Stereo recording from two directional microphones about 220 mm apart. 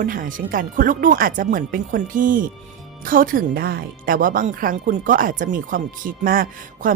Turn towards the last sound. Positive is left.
turn(degrees=-40)  # may be behind; listen again after turning